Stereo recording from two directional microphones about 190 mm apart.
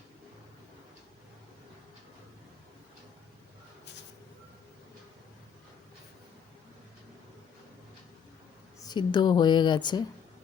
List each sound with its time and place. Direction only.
8.8 s speech: 20° left (ahead or behind)